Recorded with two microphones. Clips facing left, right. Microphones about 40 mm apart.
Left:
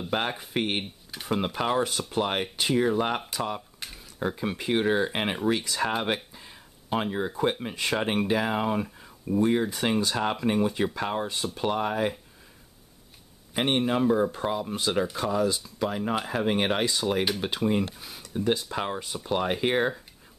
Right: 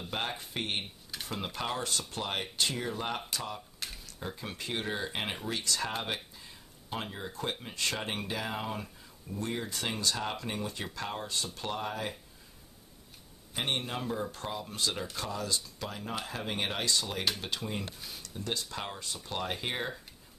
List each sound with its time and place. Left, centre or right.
0.1 s speech: left
3.2 s speech: centre
3.8 s a sound: centre
4.2 s speech: left
6.1 s a sound: left
7.7 s speech: centre
13.5 s speech: left
16.8 s speech: centre
17.9 s a sound: centre
18.3 s speech: centre